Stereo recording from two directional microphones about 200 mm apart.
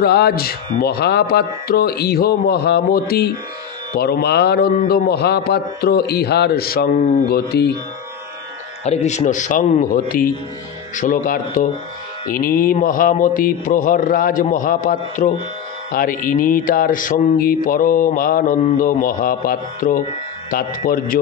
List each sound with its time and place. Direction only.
0.0 s mantra: 50° left (ahead or behind)
8.8 s speech: 35° left (ahead or behind)
12.3 s mantra: 45° left (ahead or behind)